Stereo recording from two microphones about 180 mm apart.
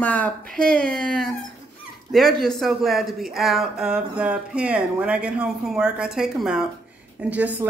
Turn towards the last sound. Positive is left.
turn(degrees=-10)  # may be behind; listen again after turning